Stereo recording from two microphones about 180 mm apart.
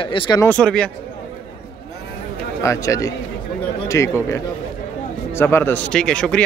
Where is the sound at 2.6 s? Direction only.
15° left (ahead or behind).